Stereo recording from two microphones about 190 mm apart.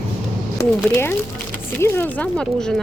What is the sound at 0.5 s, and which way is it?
Speech, 10° left (ahead or behind).